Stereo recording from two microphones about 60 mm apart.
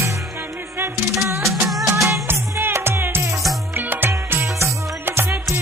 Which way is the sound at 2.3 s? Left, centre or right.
Right.